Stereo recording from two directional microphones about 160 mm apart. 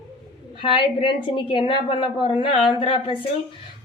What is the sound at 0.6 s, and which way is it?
A woman's voice, 35° left (ahead or behind).